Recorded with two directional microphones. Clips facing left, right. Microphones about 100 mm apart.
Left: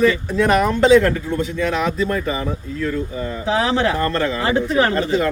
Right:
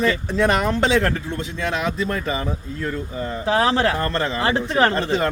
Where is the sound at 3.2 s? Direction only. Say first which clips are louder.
Right 1 dB; 40° right (ahead or behind).